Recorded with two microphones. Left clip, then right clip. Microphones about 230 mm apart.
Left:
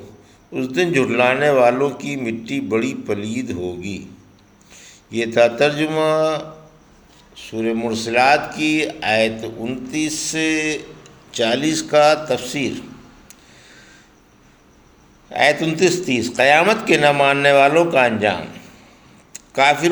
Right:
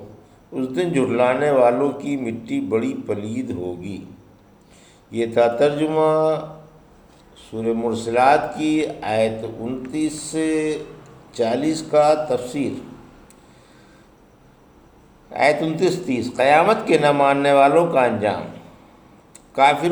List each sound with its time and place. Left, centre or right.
0.6 s a man's voice: left
15.7 s a man's voice: left
19.3 s a sound: left